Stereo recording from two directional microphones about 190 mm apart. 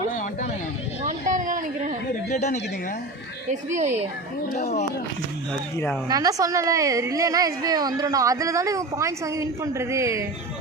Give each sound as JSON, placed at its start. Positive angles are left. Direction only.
{"t": 1.0, "sound": "a sound", "side_deg": -40}
{"t": 2.3, "sound": "speech", "side_deg": 40}
{"t": 3.5, "sound": "speech", "side_deg": -40}
{"t": 4.5, "sound": "speech", "side_deg": 35}
{"t": 6.1, "sound": "a woman's voice", "side_deg": -20}